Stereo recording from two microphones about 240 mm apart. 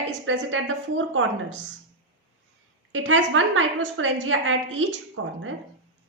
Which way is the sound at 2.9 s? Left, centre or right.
Right.